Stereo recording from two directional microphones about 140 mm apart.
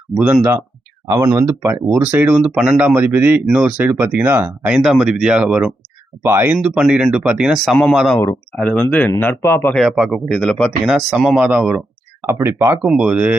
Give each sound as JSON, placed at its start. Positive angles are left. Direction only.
{"t": 1.1, "sound": "speech", "side_deg": -20}
{"t": 9.7, "sound": "speech", "side_deg": 0}
{"t": 12.8, "sound": "speech", "side_deg": -5}